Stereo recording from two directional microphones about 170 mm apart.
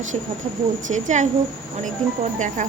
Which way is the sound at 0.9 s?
45° right (ahead or behind).